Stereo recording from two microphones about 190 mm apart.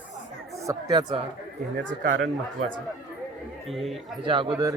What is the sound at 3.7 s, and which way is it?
Speech, centre (ahead or behind).